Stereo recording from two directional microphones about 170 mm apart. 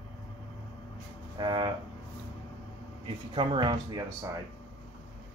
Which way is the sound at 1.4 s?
25° right (ahead or behind).